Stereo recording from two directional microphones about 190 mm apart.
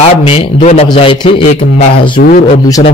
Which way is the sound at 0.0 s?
30° left (ahead or behind).